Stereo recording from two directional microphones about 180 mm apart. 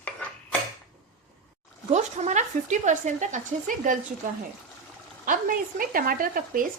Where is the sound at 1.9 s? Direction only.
40° right (ahead or behind).